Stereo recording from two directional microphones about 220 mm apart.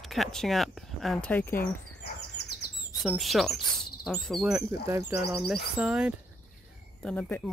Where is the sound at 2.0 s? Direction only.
50° left (ahead or behind).